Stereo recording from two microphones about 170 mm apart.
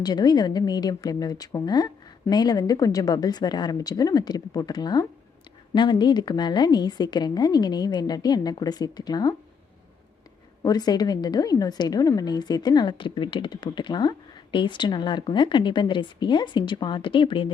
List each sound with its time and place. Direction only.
0.0 s a woman's voice: 25° left (ahead or behind)
10.6 s a woman's voice: 20° left (ahead or behind)